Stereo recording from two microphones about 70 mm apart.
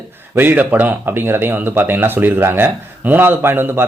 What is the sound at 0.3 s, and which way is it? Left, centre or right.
A man's voice, right.